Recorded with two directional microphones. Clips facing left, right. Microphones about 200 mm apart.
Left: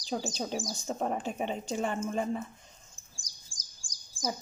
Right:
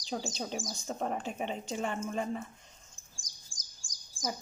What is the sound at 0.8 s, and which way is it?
A woman's voice, 40° left (ahead or behind).